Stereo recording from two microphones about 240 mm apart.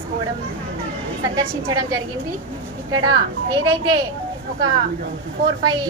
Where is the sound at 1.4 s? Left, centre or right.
Centre.